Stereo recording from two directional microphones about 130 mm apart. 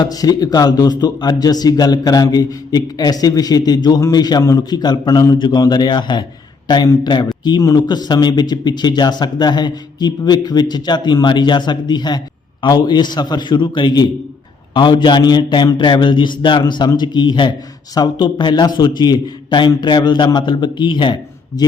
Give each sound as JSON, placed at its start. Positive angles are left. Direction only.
{"t": 0.0, "sound": "speech", "side_deg": 30}